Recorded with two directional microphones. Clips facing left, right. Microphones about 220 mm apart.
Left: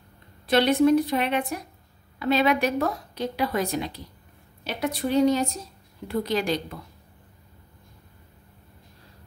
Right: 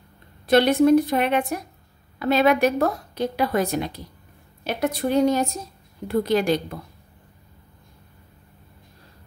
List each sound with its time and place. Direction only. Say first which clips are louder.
0.5 s a woman's voice: right 3 dB; 45° right (ahead or behind)